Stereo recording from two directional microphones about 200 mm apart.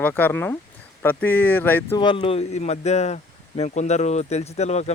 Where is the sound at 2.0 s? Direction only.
25° left (ahead or behind).